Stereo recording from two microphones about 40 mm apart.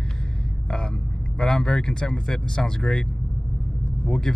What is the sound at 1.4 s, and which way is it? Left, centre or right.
Speech, centre.